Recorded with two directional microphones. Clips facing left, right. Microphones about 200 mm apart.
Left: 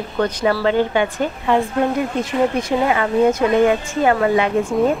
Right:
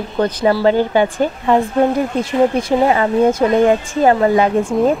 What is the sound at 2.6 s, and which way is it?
Speech, 30° right (ahead or behind).